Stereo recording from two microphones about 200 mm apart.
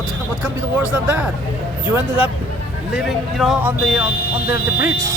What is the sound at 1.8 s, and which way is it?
Speech, 5° right (ahead or behind).